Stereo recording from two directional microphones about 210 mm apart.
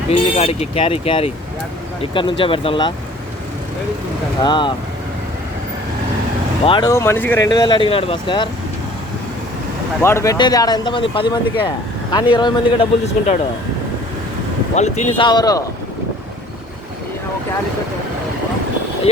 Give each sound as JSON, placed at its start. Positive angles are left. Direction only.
{"t": 0.1, "sound": "speech", "side_deg": 30}
{"t": 4.4, "sound": "speech", "side_deg": 20}
{"t": 6.7, "sound": "speech", "side_deg": 20}
{"t": 10.0, "sound": "speech", "side_deg": 15}
{"t": 14.8, "sound": "speech", "side_deg": 30}
{"t": 15.3, "sound": "speech", "side_deg": 20}